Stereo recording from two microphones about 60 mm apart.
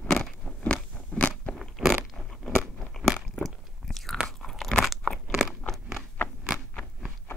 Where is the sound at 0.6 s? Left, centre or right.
Left.